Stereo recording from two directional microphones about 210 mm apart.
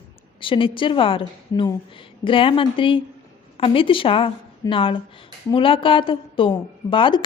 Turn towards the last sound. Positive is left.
turn(degrees=25)  # may be behind; listen again after turning